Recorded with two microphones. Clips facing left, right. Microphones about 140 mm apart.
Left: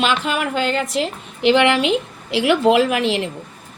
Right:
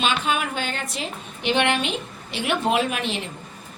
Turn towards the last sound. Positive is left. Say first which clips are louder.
# left 8 dB
turn(degrees=90)